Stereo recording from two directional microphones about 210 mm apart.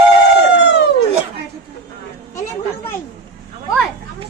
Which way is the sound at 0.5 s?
55° left (ahead or behind).